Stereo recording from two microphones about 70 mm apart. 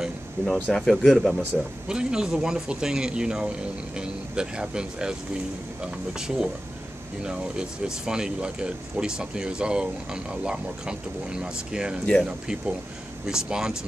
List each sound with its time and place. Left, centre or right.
0.6 s speech: centre
0.8 s speech: centre
1.5 s speech: centre
6.1 s speech: centre